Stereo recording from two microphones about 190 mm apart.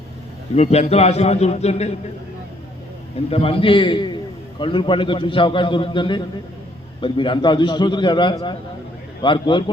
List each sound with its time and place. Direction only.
0.5 s a man's voice: 35° left (ahead or behind)
3.2 s a man's voice: 30° left (ahead or behind)